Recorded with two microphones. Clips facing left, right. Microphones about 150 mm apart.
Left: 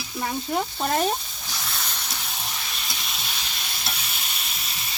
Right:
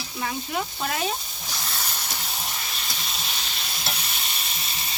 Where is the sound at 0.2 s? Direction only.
35° left (ahead or behind).